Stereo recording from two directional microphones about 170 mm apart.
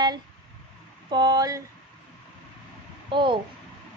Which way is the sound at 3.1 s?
30° right (ahead or behind).